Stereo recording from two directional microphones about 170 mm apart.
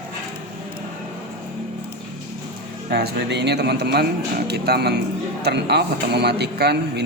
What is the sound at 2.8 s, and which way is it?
Speech, 70° right (ahead or behind).